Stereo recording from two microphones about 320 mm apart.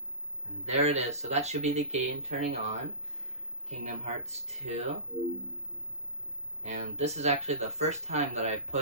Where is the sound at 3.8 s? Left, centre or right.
Right.